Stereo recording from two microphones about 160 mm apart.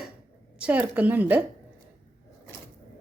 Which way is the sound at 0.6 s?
10° right (ahead or behind).